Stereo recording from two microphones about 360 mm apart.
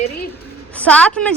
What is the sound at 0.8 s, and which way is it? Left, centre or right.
Speech, centre.